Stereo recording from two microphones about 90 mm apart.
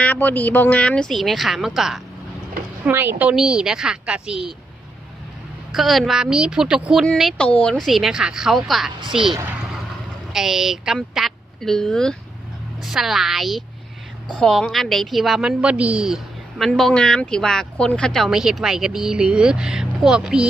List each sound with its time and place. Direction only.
0.0 s speech: 20° left (ahead or behind); by 2.0 s 5° right (ahead or behind)
2.8 s a woman's voice: 25° right (ahead or behind)
3.3 s speech: 5° right (ahead or behind)
5.8 s a woman's voice: centre (ahead or behind)
7.3 s speech: 15° left (ahead or behind)
7.8 s a woman's voice: 5° right (ahead or behind)
10.3 s a woman's voice: 5° right (ahead or behind)
12.8 s a woman's voice: 5° right (ahead or behind)
18.3 s speech: 5° right (ahead or behind)